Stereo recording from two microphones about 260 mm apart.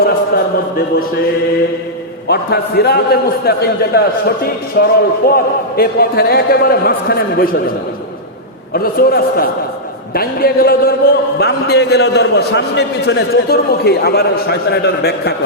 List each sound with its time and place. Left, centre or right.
2.2 s a man's voice: left
8.7 s a man's voice: left